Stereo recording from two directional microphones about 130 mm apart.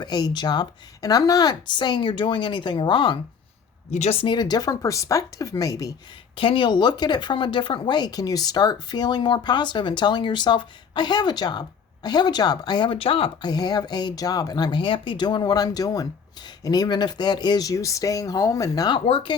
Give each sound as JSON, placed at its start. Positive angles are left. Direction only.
{"t": 0.0, "sound": "speech", "side_deg": 35}
{"t": 3.9, "sound": "speech", "side_deg": 55}
{"t": 4.2, "sound": "speech", "side_deg": 35}
{"t": 6.3, "sound": "speech", "side_deg": 45}
{"t": 13.5, "sound": "speech", "side_deg": 30}